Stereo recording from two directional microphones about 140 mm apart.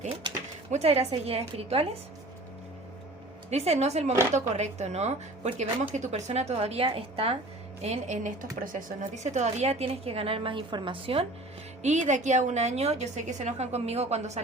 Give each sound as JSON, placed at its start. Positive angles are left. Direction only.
{"t": 0.7, "sound": "speech", "side_deg": -50}
{"t": 3.5, "sound": "speech", "side_deg": -50}
{"t": 7.8, "sound": "speech", "side_deg": -55}
{"t": 11.8, "sound": "speech", "side_deg": -60}